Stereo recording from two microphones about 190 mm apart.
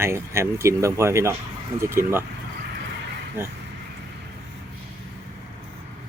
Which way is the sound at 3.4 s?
10° right (ahead or behind).